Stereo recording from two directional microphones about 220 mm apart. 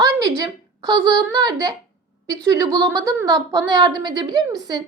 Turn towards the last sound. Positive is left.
turn(degrees=-15)  # may be behind; listen again after turning